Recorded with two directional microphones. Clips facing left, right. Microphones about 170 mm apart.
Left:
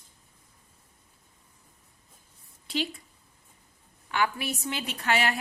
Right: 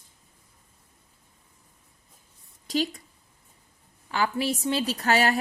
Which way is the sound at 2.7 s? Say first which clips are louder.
Right 4 dB; 40° right (ahead or behind).